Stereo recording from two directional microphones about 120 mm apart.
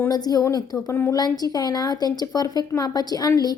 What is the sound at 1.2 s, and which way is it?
Speech, 35° left (ahead or behind).